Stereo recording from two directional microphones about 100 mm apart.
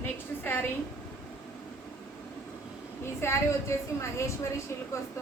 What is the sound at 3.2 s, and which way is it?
A woman's voice, 30° left (ahead or behind).